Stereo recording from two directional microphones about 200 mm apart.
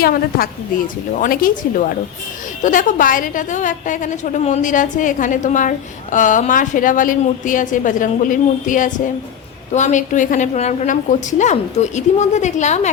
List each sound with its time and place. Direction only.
0.0 s a woman's voice: 45° left (ahead or behind)